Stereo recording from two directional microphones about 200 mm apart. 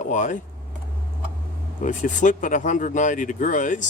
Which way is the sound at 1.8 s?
40° left (ahead or behind).